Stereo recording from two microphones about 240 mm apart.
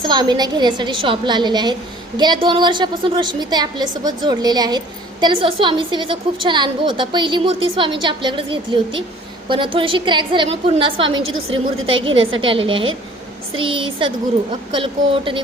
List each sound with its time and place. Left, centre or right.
0.0 s a woman's voice: centre
11.1 s a woman's voice: right
12.4 s a woman's voice: right